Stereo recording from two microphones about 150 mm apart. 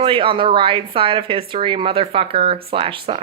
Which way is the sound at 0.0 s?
35° right (ahead or behind).